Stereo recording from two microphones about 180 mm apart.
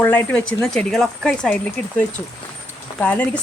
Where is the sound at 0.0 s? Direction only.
10° left (ahead or behind).